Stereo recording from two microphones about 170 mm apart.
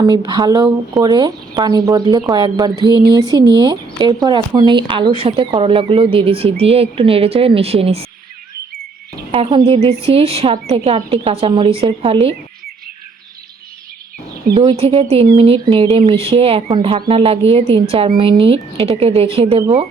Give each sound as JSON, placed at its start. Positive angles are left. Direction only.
{"t": 0.0, "sound": "speech", "side_deg": -25}
{"t": 9.3, "sound": "speech", "side_deg": -30}
{"t": 14.5, "sound": "speech", "side_deg": -30}